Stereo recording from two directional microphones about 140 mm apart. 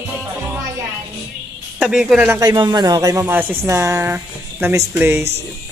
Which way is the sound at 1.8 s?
5° right (ahead or behind).